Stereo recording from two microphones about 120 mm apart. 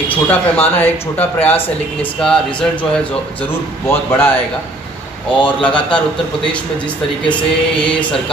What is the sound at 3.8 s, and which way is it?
Speech, 20° left (ahead or behind).